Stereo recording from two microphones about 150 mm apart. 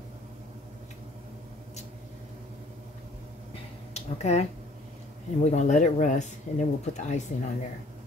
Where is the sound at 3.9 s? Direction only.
45° left (ahead or behind).